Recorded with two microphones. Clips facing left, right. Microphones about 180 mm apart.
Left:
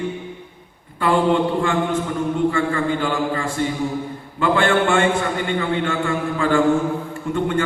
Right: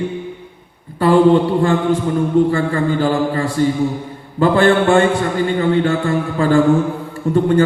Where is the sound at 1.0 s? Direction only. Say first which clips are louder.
Right 6 dB; 35° right (ahead or behind).